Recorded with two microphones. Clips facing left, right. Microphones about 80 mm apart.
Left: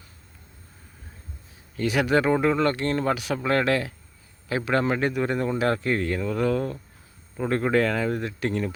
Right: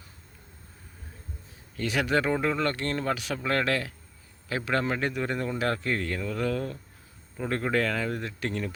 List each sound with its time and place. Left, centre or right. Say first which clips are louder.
1.7 s speech: left 4 dB; centre